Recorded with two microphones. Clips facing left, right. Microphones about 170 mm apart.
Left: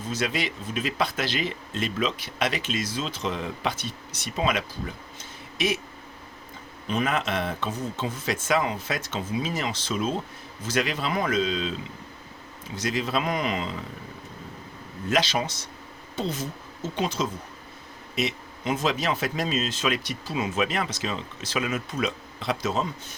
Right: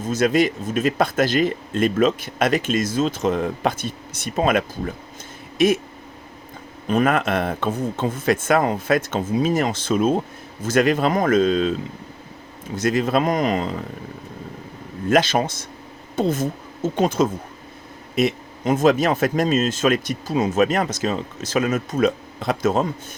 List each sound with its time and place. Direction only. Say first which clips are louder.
0.0 s speech: right 10 dB; 45° right (ahead or behind)
6.8 s speech: right 7 dB; 50° right (ahead or behind)
12.7 s speech: right 8 dB; 50° right (ahead or behind)
15.1 s speech: right 7 dB; 50° right (ahead or behind)